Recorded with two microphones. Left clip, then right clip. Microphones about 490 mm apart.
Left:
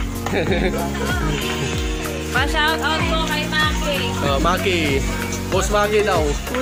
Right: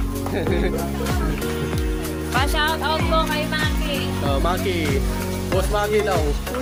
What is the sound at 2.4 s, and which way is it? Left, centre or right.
Speech, right.